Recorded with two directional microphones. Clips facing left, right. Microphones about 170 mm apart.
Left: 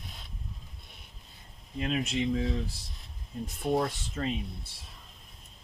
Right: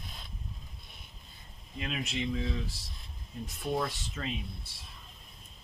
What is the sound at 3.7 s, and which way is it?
Speech, 40° left (ahead or behind).